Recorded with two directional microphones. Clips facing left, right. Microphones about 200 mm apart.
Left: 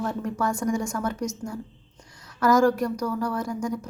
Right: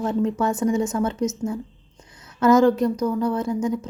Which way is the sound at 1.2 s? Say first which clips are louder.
Right 6 dB; 5° right (ahead or behind).